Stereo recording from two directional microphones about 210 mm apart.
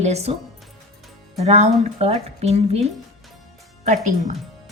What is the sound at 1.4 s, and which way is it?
Speech, 30° right (ahead or behind).